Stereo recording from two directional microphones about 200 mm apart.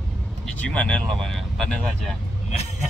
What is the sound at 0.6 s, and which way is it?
Speech, 5° left (ahead or behind).